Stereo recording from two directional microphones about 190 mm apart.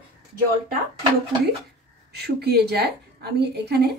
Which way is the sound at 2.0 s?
55° right (ahead or behind).